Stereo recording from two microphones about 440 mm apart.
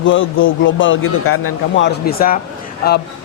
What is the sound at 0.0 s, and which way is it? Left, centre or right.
A man's voice, left.